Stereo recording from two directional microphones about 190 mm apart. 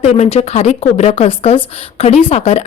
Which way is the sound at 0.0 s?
35° left (ahead or behind).